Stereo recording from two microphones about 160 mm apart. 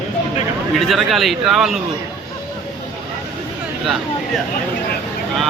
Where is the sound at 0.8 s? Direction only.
Centre (ahead or behind).